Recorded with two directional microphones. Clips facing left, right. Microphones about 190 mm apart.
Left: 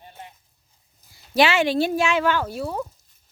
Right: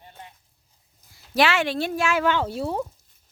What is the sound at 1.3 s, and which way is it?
Speech, centre (ahead or behind).